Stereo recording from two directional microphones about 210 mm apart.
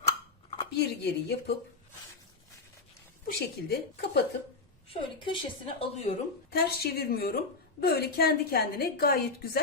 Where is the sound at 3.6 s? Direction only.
50° left (ahead or behind).